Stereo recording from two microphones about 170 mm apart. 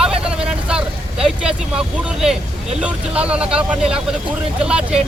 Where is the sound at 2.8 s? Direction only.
5° right (ahead or behind).